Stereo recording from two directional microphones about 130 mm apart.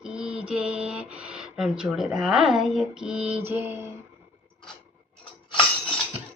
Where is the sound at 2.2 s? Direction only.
5° right (ahead or behind); by 3.9 s 20° right (ahead or behind).